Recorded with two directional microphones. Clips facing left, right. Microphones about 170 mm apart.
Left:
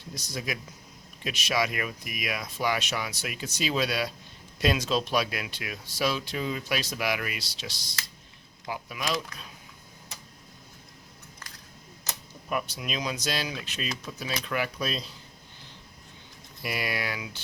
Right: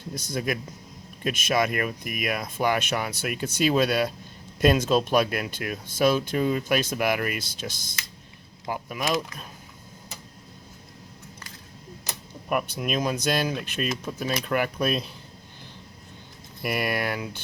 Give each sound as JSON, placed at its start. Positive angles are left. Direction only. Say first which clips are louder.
{"t": 0.1, "sound": "speech", "louder": "right 6 dB", "side_deg": -50}
{"t": 12.5, "sound": "speech", "louder": "right 5 dB", "side_deg": -55}
{"t": 16.6, "sound": "speech", "louder": "right 5 dB", "side_deg": -55}